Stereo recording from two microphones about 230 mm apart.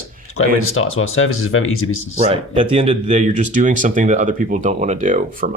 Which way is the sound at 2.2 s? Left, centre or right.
Right.